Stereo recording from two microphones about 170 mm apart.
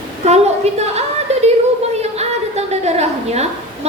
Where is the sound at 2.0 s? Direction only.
40° right (ahead or behind).